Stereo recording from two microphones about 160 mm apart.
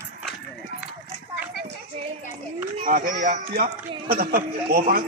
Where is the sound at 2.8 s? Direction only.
55° right (ahead or behind).